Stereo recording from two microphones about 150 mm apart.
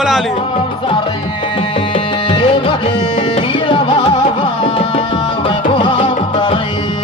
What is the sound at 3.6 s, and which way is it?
Music, 35° left (ahead or behind).